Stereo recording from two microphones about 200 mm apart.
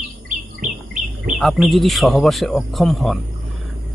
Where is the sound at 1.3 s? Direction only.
Centre (ahead or behind).